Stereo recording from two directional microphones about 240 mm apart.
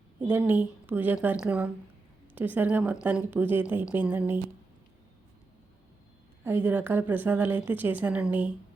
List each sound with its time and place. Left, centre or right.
0.2 s a woman's voice: centre
6.4 s a woman's voice: centre